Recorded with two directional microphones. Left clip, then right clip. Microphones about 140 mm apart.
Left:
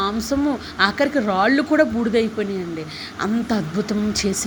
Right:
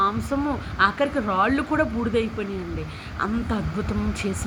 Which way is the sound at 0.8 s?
45° left (ahead or behind).